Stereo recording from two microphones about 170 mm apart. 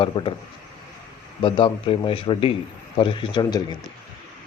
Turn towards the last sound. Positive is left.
turn(degrees=25)  # may be behind; listen again after turning